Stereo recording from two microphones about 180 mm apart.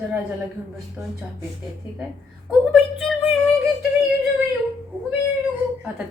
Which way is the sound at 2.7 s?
Centre (ahead or behind).